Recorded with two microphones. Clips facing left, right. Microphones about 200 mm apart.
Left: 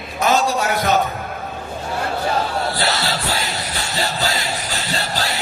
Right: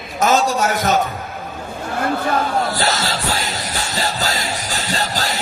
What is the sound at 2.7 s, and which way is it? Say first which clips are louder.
Music: right 1 dB; 45° right (ahead or behind).